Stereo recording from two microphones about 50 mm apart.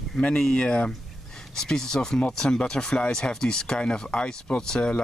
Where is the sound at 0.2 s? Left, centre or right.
Centre.